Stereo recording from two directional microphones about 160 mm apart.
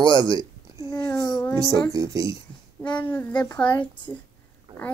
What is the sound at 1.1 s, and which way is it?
Music, 25° left (ahead or behind).